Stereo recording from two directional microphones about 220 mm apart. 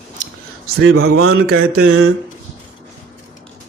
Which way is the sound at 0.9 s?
70° right (ahead or behind).